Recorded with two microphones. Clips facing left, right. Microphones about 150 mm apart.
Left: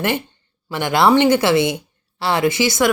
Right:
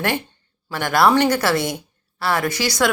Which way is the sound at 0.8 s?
20° left (ahead or behind).